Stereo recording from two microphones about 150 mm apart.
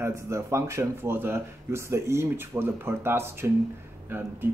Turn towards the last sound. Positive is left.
turn(degrees=-15)  # may be behind; listen again after turning